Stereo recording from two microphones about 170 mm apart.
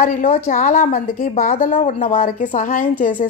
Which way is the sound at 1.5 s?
40° left (ahead or behind).